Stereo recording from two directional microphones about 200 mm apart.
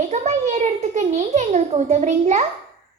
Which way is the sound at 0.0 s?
35° right (ahead or behind).